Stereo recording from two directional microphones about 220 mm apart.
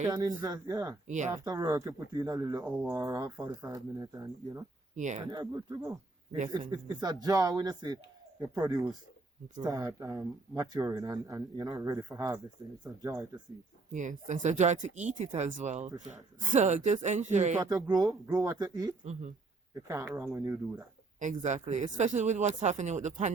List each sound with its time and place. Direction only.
0.0 s speech: 15° right (ahead or behind)
1.0 s speech: 35° right (ahead or behind)
1.5 s speech: 15° right (ahead or behind)
4.9 s speech: 35° right (ahead or behind)
5.2 s speech: 20° right (ahead or behind)
13.9 s speech: 35° right (ahead or behind)
15.3 s speech: 25° right (ahead or behind)
18.1 s speech: 15° right (ahead or behind)
21.2 s speech: 35° right (ahead or behind)